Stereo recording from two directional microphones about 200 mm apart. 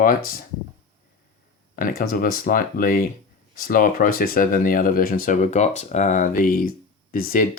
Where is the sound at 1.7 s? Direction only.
45° left (ahead or behind).